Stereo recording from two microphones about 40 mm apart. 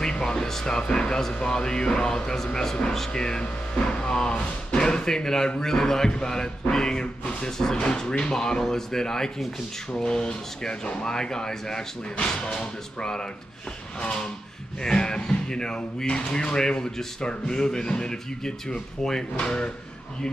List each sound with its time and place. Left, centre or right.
0.0 s speech: centre
14.8 s speech: centre